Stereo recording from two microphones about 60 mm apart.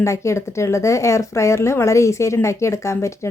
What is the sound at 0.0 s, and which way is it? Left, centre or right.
A woman's voice, left.